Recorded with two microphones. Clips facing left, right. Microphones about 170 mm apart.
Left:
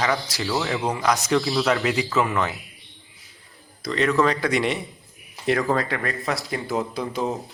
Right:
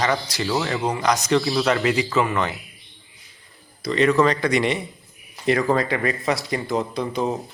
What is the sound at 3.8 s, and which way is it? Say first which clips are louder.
Speech: right 3 dB; centre (ahead or behind).